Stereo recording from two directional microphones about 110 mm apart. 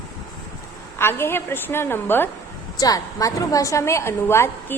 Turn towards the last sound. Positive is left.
turn(degrees=20)  # may be behind; listen again after turning